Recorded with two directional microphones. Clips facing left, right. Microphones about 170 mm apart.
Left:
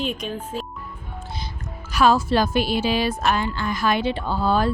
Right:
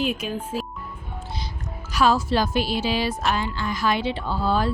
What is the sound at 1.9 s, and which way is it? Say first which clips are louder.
Speech: left 2 dB; 55° left (ahead or behind).